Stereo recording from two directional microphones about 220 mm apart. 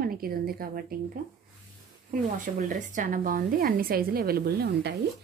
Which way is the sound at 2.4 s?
35° right (ahead or behind).